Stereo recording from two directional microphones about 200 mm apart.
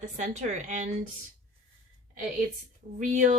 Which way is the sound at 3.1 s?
40° right (ahead or behind).